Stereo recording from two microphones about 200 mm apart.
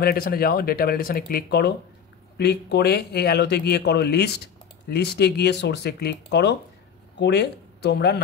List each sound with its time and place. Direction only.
0.0 s speech: 50° left (ahead or behind)